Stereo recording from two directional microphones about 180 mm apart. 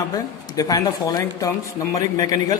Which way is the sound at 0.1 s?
20° left (ahead or behind).